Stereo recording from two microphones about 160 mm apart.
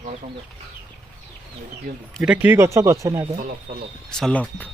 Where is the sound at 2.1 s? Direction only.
5° right (ahead or behind).